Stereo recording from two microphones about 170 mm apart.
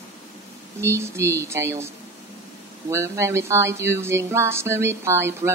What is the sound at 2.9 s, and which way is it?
Speech, 15° right (ahead or behind).